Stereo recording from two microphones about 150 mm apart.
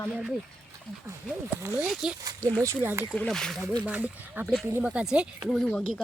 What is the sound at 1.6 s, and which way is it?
Speech, 15° right (ahead or behind).